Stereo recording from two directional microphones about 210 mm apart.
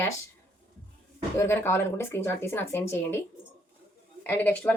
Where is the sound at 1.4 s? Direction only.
10° left (ahead or behind).